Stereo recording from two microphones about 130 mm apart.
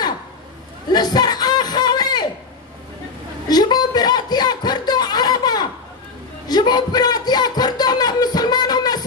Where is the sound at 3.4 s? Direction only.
30° left (ahead or behind).